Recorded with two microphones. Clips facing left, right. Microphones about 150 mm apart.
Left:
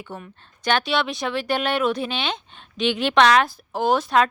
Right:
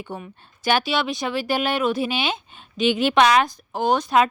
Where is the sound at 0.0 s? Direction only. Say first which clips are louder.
Right 3 dB; 10° right (ahead or behind).